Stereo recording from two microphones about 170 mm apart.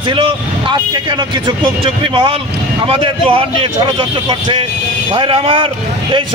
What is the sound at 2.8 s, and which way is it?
A man's voice, 30° right (ahead or behind).